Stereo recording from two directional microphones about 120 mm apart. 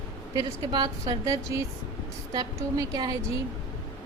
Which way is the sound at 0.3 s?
35° right (ahead or behind).